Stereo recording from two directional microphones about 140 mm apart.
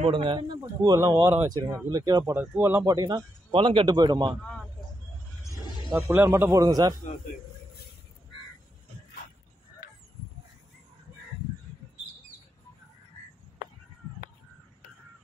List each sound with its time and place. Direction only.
0.0 s speech: 40° right (ahead or behind)
2.3 s speech: 10° right (ahead or behind)
3.5 s a man's voice: 40° right (ahead or behind)
4.4 s a sound: 5° left (ahead or behind)
5.9 s speech: 15° right (ahead or behind)
6.6 s speech: 25° right (ahead or behind)